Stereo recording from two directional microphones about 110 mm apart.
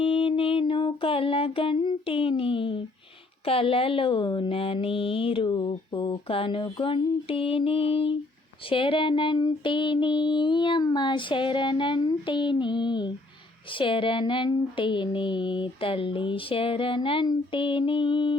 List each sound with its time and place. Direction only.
0.0 s a sound: 55° left (ahead or behind)
3.4 s speech: 55° left (ahead or behind)
6.7 s mantra: 50° left (ahead or behind)
8.7 s speech: 50° left (ahead or behind)